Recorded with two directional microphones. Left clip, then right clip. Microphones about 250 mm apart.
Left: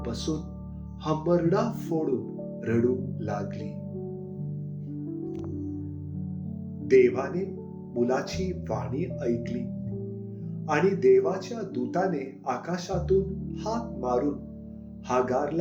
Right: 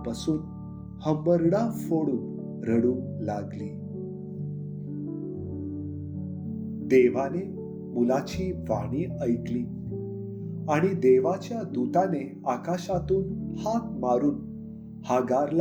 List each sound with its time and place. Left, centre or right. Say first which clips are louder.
1.0 s speech: right 2 dB; right
6.8 s speech: left 1 dB; right
10.7 s speech: even; right